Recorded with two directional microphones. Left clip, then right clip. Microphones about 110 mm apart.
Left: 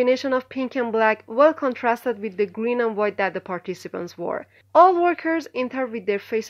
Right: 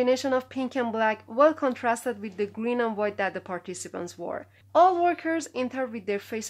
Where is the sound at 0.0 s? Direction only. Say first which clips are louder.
Left 4 dB; 25° left (ahead or behind).